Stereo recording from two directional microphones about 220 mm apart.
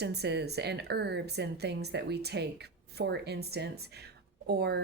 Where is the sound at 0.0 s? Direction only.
50° right (ahead or behind).